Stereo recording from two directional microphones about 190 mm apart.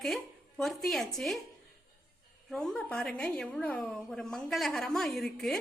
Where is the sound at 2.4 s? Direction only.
5° left (ahead or behind).